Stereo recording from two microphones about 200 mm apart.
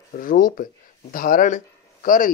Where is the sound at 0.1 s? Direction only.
45° left (ahead or behind).